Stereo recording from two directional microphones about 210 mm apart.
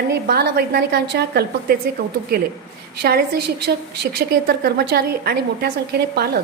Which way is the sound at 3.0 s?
50° right (ahead or behind).